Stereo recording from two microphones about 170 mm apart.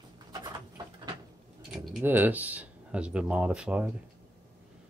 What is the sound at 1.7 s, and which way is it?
Speech, 10° right (ahead or behind).